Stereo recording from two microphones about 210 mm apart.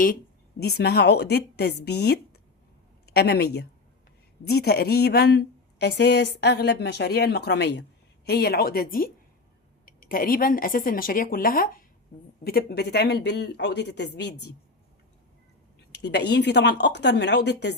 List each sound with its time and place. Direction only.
0.6 s a woman's voice: 50° left (ahead or behind)
15.9 s a woman's voice: 55° left (ahead or behind)